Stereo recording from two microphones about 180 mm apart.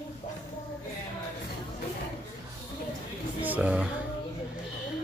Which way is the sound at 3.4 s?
5° right (ahead or behind).